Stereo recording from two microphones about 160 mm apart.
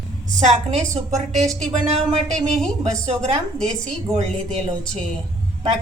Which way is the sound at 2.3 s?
5° left (ahead or behind).